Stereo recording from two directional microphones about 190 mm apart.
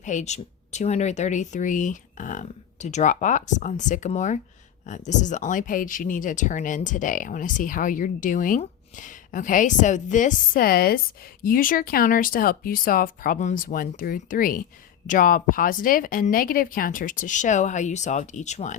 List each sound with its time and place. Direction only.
0.0 s speech: 40° left (ahead or behind)